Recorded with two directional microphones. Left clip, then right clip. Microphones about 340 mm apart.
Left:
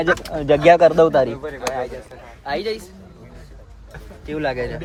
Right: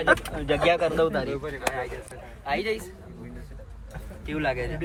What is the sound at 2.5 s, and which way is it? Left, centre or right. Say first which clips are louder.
Speech: left 3 dB; centre.